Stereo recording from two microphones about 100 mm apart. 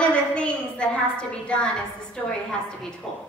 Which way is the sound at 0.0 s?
10° left (ahead or behind).